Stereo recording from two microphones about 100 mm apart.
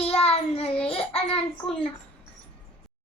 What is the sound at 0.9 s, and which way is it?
Speech, 75° left (ahead or behind).